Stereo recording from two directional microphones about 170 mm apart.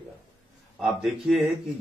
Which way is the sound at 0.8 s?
Centre (ahead or behind).